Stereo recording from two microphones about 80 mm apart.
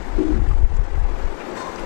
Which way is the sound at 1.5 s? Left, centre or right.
Centre.